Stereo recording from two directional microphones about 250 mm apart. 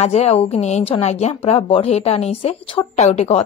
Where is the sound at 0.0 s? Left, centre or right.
Left.